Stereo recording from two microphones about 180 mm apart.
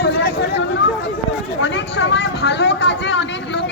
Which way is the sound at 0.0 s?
70° left (ahead or behind).